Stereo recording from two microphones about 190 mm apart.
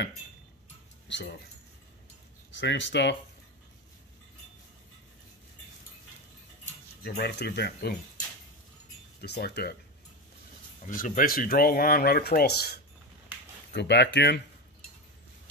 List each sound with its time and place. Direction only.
1.0 s a sound: 65° left (ahead or behind)
2.5 s speech: 70° left (ahead or behind)
7.0 s speech: 55° left (ahead or behind)
9.2 s speech: 60° left (ahead or behind)
10.8 s speech: 40° left (ahead or behind); by 14.4 s 65° left (ahead or behind)